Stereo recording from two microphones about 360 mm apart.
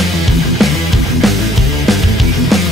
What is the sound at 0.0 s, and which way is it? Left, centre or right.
Music, centre.